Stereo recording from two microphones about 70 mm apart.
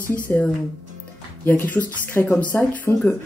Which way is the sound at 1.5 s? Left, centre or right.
Left.